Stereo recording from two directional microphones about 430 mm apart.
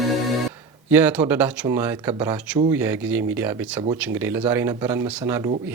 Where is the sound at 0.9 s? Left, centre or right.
Centre.